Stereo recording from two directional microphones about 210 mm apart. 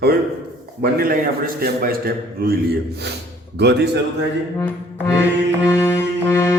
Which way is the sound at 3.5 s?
50° right (ahead or behind).